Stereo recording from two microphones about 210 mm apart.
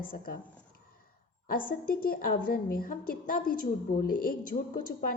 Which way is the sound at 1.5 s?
40° left (ahead or behind).